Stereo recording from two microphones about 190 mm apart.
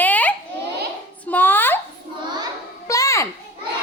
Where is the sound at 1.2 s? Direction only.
10° left (ahead or behind).